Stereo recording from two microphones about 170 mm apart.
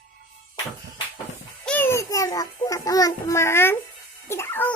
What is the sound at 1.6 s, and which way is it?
A child's voice, 10° left (ahead or behind).